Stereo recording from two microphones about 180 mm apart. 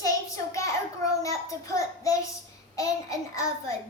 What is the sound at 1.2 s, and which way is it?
Child singing, 20° left (ahead or behind).